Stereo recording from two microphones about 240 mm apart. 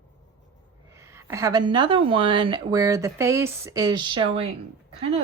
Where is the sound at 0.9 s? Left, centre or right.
Centre.